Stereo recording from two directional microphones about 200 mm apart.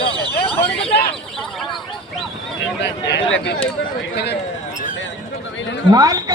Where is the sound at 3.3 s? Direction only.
70° left (ahead or behind).